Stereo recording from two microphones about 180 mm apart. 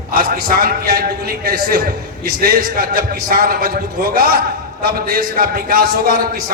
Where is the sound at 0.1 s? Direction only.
50° right (ahead or behind).